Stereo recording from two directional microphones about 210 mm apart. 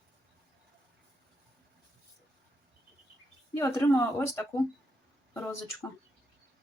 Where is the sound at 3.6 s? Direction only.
15° left (ahead or behind).